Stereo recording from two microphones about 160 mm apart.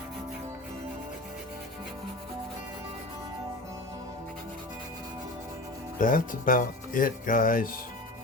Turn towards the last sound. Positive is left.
turn(degrees=60)  # may be behind; listen again after turning